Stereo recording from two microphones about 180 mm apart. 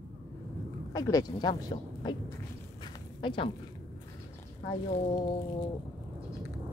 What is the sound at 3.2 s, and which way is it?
Speech, 25° left (ahead or behind).